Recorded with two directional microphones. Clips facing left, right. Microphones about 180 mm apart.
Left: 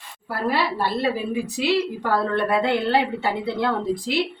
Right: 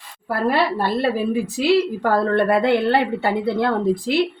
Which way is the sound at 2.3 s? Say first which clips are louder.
Right 4 dB; 60° right (ahead or behind).